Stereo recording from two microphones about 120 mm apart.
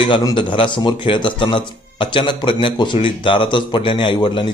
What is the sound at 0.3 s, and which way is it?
A man's voice, 45° left (ahead or behind).